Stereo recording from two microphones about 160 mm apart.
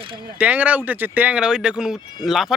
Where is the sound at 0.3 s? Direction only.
10° right (ahead or behind).